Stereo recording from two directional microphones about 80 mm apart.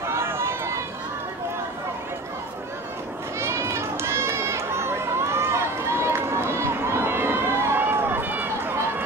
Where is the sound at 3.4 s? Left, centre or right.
Right.